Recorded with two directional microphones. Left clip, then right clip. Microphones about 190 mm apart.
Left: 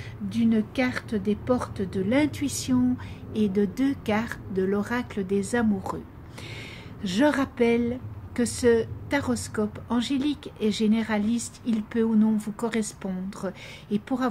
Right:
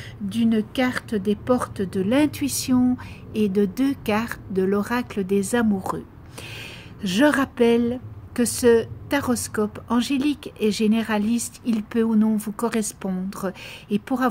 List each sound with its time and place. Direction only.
0.3 s speech: 55° right (ahead or behind)